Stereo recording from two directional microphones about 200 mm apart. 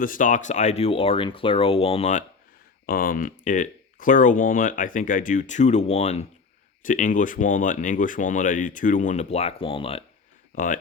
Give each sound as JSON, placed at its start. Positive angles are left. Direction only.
{"t": 0.0, "sound": "speech", "side_deg": 40}
{"t": 2.8, "sound": "speech", "side_deg": 45}
{"t": 10.5, "sound": "speech", "side_deg": 40}